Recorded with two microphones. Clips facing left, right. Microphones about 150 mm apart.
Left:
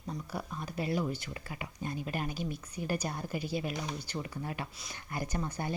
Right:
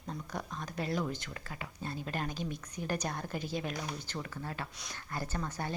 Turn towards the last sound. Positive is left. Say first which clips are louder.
# left 2 dB
turn(degrees=15)  # may be behind; listen again after turning